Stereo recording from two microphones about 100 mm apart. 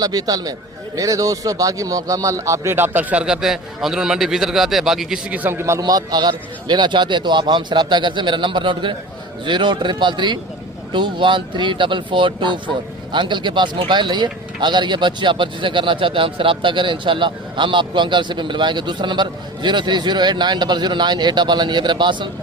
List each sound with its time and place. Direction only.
0.0 s a man's voice: 40° right (ahead or behind); by 5.4 s 5° right (ahead or behind)
5.4 s a man's voice: 20° right (ahead or behind)
5.8 s speech: 45° right (ahead or behind)